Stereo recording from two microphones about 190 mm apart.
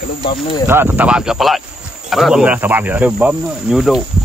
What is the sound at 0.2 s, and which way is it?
Speech, 25° left (ahead or behind).